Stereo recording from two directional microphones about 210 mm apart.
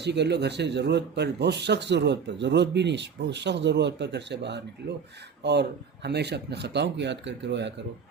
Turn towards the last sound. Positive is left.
turn(degrees=-55)  # may be behind; listen again after turning